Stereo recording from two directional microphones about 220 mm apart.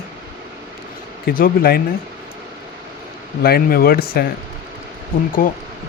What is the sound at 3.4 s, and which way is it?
Speech, 45° left (ahead or behind).